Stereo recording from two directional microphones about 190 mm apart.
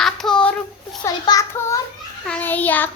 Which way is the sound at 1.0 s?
15° left (ahead or behind).